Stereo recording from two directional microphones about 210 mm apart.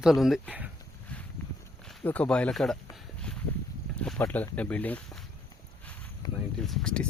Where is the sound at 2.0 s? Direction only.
5° left (ahead or behind).